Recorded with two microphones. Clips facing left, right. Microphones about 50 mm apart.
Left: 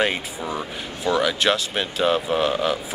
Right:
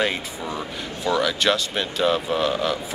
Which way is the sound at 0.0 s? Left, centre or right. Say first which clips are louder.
Left 1 dB; centre.